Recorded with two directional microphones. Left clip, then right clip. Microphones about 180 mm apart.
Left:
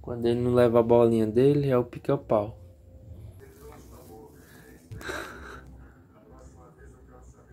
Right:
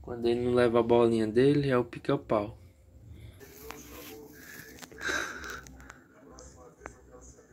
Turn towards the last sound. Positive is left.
turn(degrees=10)  # may be behind; listen again after turning